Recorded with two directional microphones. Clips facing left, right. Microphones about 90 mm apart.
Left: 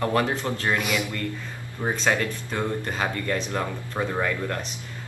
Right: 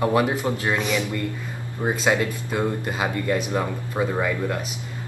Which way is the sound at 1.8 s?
10° right (ahead or behind).